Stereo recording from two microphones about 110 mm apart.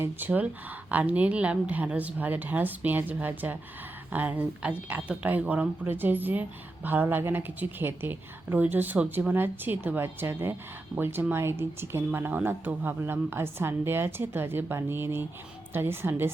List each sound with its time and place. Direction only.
0.0 s speech: 15° right (ahead or behind)